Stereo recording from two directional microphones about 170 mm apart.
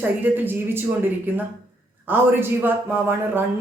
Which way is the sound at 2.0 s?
10° right (ahead or behind).